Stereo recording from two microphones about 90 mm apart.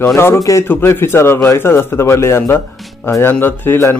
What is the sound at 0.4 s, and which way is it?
Speech, 35° left (ahead or behind).